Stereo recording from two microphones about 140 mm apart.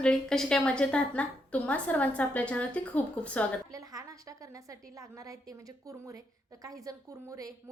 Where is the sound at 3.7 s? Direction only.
25° right (ahead or behind).